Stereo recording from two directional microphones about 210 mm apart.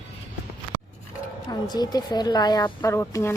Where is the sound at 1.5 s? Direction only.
20° left (ahead or behind).